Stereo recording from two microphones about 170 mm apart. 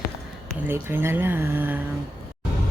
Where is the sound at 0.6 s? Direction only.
15° right (ahead or behind).